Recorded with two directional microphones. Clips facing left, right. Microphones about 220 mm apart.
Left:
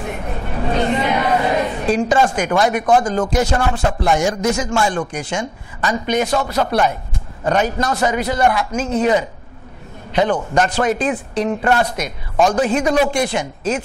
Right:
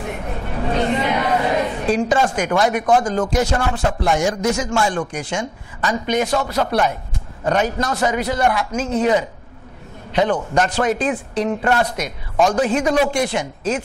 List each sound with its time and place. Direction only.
0.0 s chatter: 20° left (ahead or behind)
2.6 s speech: 20° left (ahead or behind)
6.3 s speech: 25° left (ahead or behind)
12.4 s speech: 25° left (ahead or behind)